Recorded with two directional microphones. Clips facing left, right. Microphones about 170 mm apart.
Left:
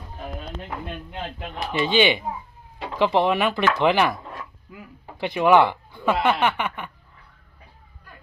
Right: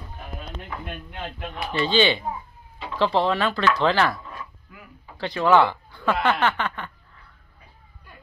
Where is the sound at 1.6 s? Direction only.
20° left (ahead or behind).